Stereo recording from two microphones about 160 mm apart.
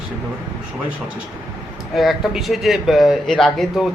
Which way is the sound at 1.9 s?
Centre (ahead or behind).